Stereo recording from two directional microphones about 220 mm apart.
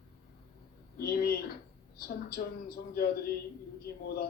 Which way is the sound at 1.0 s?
45° left (ahead or behind).